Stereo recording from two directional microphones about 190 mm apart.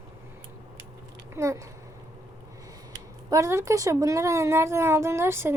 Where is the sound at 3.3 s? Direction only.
15° right (ahead or behind).